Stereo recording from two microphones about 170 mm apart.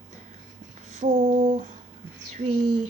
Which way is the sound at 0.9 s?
45° right (ahead or behind).